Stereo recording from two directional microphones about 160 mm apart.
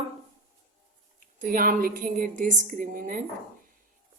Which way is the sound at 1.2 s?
60° right (ahead or behind).